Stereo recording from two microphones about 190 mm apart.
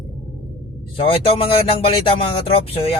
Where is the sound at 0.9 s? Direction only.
30° left (ahead or behind).